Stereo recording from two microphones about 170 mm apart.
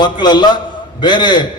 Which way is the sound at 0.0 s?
25° left (ahead or behind).